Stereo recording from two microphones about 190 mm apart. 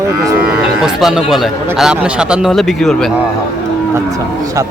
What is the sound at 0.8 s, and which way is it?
A man's voice, centre (ahead or behind).